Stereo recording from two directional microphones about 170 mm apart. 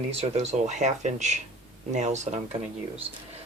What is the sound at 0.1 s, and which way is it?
Speech, 40° right (ahead or behind).